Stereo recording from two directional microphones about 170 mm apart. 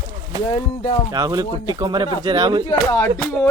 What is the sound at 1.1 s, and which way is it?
Speech, 20° right (ahead or behind).